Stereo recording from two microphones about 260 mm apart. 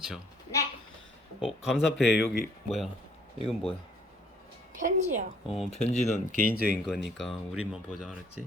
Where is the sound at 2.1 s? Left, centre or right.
Left.